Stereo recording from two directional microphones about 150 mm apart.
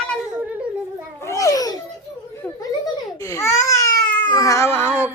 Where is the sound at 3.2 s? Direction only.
20° left (ahead or behind).